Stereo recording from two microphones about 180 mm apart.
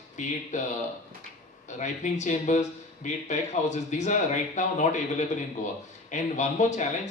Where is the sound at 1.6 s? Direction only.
40° left (ahead or behind).